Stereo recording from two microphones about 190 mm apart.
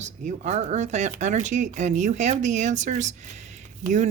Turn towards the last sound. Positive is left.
turn(degrees=-40)  # may be behind; listen again after turning